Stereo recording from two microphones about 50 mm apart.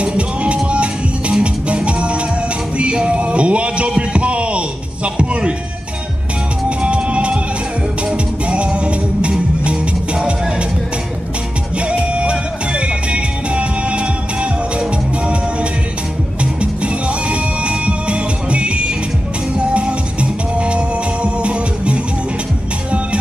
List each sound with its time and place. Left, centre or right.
0.0 s music: right
2.8 s a sound: right
6.8 s music: right
8.5 s music: right
11.9 s music: right
16.8 s music: right